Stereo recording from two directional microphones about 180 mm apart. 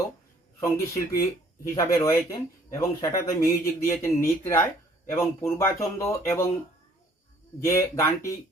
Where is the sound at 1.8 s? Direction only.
15° left (ahead or behind).